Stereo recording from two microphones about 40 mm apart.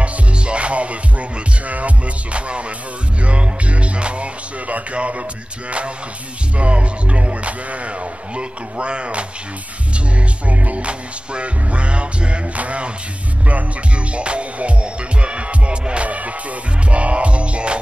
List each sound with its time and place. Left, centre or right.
0.0 s music: right
6.6 s speech: right
10.5 s speech: right
14.1 s music: right
16.9 s speech: right